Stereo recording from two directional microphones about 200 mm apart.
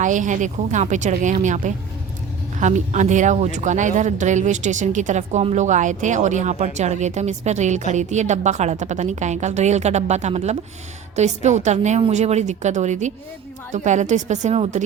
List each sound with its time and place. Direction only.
0.0 s speech: 40° right (ahead or behind)